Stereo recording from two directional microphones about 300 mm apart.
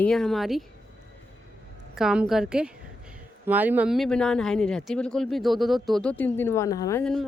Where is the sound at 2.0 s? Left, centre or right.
Centre.